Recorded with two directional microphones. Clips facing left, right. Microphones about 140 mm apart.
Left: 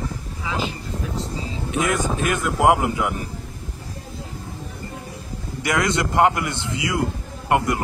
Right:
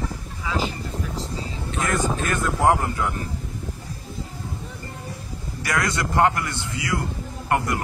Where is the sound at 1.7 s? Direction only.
15° left (ahead or behind).